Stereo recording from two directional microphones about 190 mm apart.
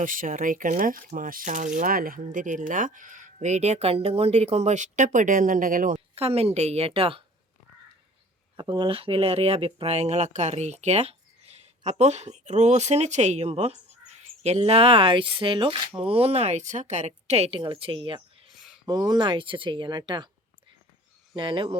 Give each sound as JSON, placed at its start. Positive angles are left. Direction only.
{"t": 0.0, "sound": "speech", "side_deg": -45}
{"t": 6.1, "sound": "speech", "side_deg": -30}
{"t": 8.5, "sound": "speech", "side_deg": -25}
{"t": 18.4, "sound": "a sound", "side_deg": 0}
{"t": 18.9, "sound": "speech", "side_deg": -20}
{"t": 21.3, "sound": "speech", "side_deg": -25}